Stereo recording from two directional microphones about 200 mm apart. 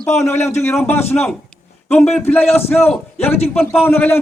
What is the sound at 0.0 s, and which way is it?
Speech, 15° left (ahead or behind).